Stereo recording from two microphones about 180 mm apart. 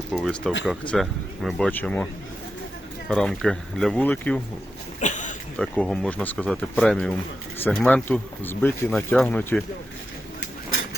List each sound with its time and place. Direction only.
0.1 s speech: centre (ahead or behind)
3.1 s speech: 5° left (ahead or behind)
4.9 s speech: 45° left (ahead or behind)
5.5 s speech: 5° left (ahead or behind)